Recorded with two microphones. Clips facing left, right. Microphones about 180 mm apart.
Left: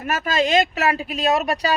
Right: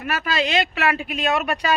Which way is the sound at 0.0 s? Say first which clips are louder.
Left 2 dB; 45° left (ahead or behind).